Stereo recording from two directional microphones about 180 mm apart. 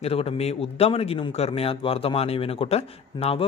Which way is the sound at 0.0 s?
35° left (ahead or behind).